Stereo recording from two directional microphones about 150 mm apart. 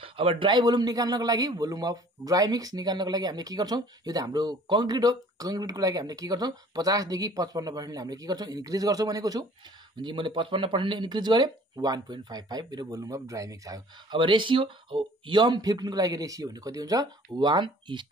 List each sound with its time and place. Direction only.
0.0 s a man's voice: 35° right (ahead or behind)